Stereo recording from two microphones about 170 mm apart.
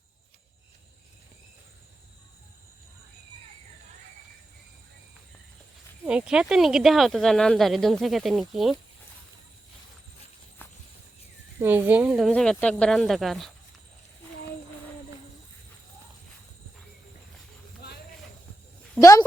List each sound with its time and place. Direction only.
6.1 s speech: 5° right (ahead or behind)
10.6 s walk: 10° left (ahead or behind)
11.6 s speech: 10° right (ahead or behind)
12.3 s speech: 5° left (ahead or behind)
18.9 s a woman's voice: 20° left (ahead or behind)